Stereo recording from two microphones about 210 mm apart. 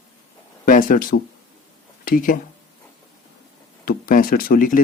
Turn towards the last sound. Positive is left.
turn(degrees=40)  # may be behind; listen again after turning